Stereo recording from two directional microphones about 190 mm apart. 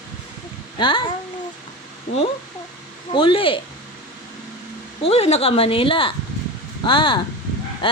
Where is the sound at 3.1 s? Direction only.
25° left (ahead or behind).